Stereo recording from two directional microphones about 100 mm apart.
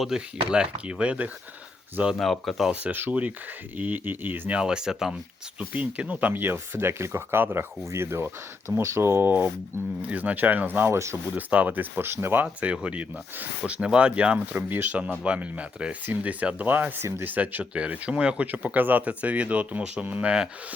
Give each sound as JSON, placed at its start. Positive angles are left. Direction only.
{"t": 0.1, "sound": "speech", "side_deg": -5}
{"t": 2.1, "sound": "speech", "side_deg": 0}
{"t": 2.8, "sound": "speech", "side_deg": -15}
{"t": 11.3, "sound": "speech", "side_deg": -15}
{"t": 17.3, "sound": "speech", "side_deg": -15}